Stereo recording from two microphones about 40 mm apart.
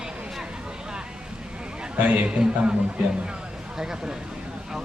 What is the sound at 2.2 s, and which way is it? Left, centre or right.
Speech, right.